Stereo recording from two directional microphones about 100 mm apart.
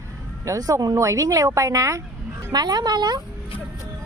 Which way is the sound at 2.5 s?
40° right (ahead or behind).